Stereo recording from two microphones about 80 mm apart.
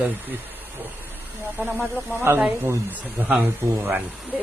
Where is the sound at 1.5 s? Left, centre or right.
Right.